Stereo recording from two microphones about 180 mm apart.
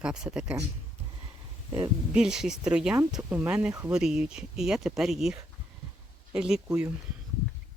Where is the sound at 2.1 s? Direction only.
5° right (ahead or behind).